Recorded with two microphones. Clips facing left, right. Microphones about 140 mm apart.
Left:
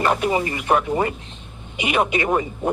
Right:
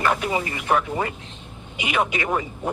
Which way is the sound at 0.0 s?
30° left (ahead or behind).